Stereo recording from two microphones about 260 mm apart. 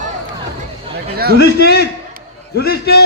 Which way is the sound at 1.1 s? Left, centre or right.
Right.